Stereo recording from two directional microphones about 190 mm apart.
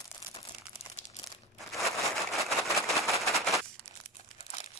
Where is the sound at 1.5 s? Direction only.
Centre (ahead or behind).